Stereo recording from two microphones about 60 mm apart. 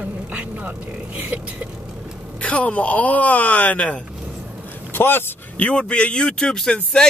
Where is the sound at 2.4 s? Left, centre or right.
Left.